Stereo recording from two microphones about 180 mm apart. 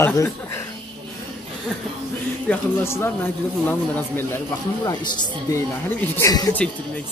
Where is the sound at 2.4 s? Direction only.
15° left (ahead or behind).